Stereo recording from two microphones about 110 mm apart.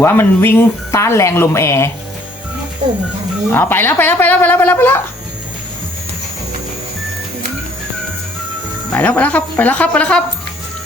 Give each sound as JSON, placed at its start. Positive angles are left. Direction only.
{"t": 0.0, "sound": "speech", "side_deg": 20}
{"t": 3.5, "sound": "speech", "side_deg": 20}
{"t": 8.9, "sound": "speech", "side_deg": 10}